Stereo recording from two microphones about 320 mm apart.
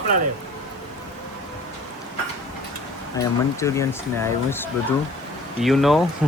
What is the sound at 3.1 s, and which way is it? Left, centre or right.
Speech, centre.